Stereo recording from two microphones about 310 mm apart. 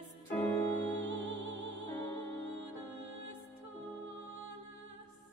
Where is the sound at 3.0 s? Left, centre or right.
Right.